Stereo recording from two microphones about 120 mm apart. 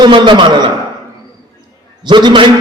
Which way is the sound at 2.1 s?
40° right (ahead or behind).